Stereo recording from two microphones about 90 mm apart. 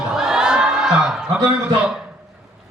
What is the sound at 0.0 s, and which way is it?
Crowd, 5° right (ahead or behind).